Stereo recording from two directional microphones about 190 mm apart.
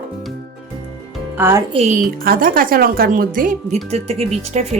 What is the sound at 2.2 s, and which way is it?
A woman's voice, 50° right (ahead or behind).